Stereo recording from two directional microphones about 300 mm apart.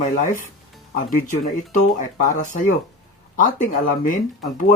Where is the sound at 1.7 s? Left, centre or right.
Left.